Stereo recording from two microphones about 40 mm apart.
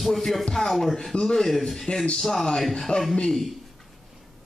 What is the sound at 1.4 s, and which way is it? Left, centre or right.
Speech, centre.